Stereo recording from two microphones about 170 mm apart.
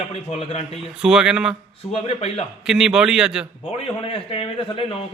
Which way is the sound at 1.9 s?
35° left (ahead or behind).